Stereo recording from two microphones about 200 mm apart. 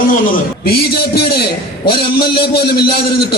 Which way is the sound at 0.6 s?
50° left (ahead or behind).